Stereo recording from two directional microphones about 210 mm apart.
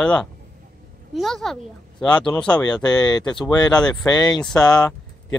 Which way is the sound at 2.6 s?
20° left (ahead or behind).